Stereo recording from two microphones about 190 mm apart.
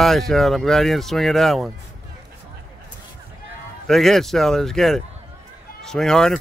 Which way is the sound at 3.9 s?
Centre (ahead or behind).